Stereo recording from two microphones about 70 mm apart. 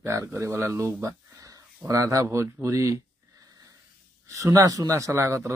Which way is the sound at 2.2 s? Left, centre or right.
Right.